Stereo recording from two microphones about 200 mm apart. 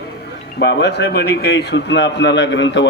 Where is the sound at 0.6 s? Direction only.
55° left (ahead or behind).